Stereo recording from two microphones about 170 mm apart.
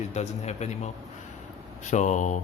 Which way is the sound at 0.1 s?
40° left (ahead or behind).